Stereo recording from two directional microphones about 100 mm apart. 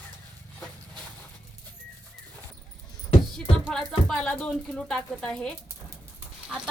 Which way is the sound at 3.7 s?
5° left (ahead or behind).